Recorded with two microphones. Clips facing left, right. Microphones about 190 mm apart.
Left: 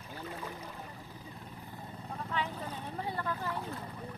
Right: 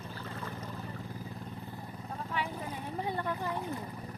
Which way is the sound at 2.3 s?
10° right (ahead or behind).